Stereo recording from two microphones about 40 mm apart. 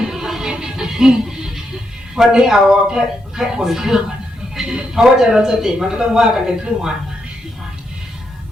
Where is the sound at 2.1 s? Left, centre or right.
Centre.